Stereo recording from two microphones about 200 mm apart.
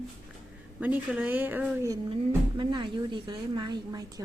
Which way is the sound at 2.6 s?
20° right (ahead or behind).